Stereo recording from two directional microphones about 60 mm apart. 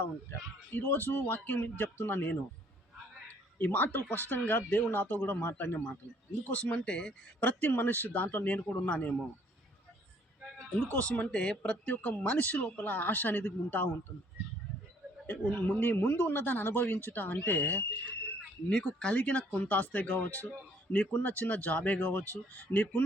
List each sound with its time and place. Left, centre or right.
0.7 s speech: left
3.6 s speech: left
6.5 s speech: left
7.4 s speech: left
10.9 s speech: left
15.3 s speech: left
18.7 s speech: centre